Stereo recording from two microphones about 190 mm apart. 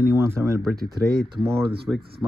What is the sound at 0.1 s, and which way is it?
Speech, 15° right (ahead or behind).